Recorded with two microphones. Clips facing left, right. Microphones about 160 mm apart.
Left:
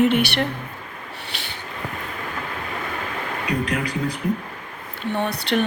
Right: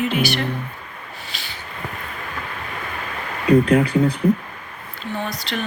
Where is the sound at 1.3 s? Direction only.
60° left (ahead or behind).